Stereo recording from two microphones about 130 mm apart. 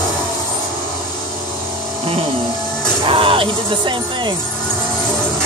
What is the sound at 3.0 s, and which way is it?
Speech, 45° right (ahead or behind).